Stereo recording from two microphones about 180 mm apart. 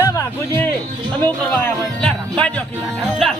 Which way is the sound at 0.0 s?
15° left (ahead or behind).